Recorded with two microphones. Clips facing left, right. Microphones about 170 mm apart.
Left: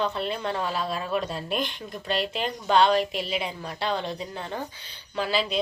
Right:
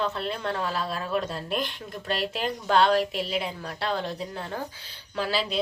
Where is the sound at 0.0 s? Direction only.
Centre (ahead or behind).